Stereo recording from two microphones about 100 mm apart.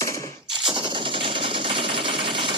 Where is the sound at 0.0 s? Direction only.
30° left (ahead or behind).